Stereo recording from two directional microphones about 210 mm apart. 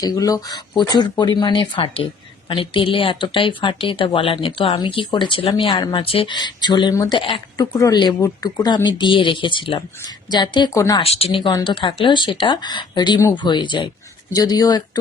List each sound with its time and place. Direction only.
0.0 s speech: 15° left (ahead or behind)